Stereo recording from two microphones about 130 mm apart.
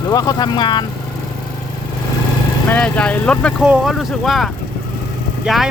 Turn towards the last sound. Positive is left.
turn(degrees=-5)  # may be behind; listen again after turning